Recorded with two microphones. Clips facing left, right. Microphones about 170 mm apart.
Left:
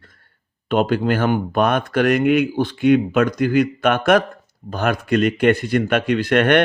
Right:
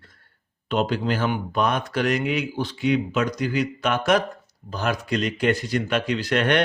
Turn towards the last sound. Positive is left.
turn(degrees=55)  # may be behind; listen again after turning